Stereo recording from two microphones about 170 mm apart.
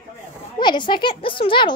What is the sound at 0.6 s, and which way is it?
Speech, 25° left (ahead or behind).